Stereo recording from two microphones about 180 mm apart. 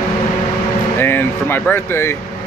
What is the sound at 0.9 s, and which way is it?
Speech, 10° left (ahead or behind).